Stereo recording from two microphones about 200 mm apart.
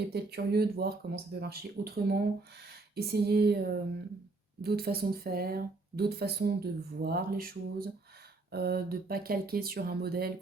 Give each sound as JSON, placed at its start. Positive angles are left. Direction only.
{"t": 0.1, "sound": "speech", "side_deg": -55}